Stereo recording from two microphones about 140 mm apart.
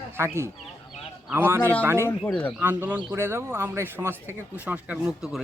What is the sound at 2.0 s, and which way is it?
Speech, 10° left (ahead or behind).